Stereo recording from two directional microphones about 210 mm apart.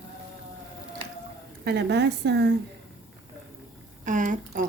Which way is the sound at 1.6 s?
55° right (ahead or behind).